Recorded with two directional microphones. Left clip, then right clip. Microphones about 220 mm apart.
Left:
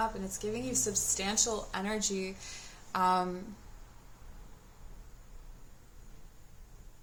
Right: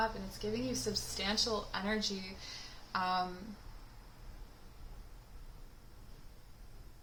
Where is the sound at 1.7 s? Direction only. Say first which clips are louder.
Left 2 dB; 40° left (ahead or behind).